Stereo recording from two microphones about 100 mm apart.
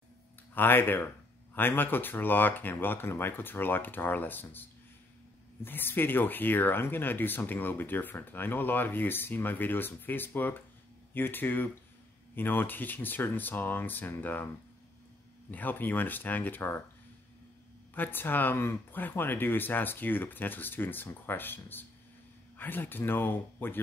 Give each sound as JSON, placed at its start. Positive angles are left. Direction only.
{"t": 0.6, "sound": "speech", "side_deg": 20}
{"t": 15.5, "sound": "speech", "side_deg": 20}
{"t": 17.9, "sound": "speech", "side_deg": 20}